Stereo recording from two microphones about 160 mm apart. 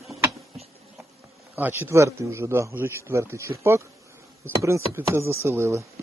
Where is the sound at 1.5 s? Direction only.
15° right (ahead or behind).